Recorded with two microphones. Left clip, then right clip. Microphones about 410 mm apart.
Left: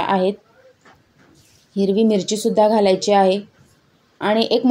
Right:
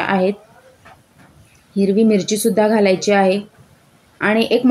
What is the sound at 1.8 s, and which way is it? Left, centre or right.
A woman's voice, right.